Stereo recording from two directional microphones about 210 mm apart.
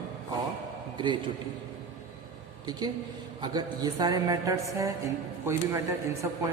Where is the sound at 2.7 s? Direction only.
20° right (ahead or behind).